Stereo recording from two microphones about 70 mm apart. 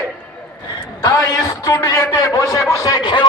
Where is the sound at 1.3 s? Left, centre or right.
Left.